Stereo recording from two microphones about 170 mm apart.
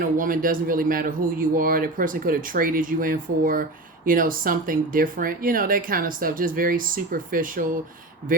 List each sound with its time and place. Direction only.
0.0 s speech: 55° right (ahead or behind)